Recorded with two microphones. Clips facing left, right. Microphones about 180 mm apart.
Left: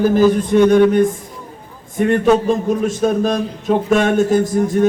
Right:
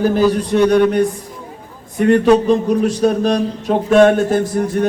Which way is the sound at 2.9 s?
45° left (ahead or behind).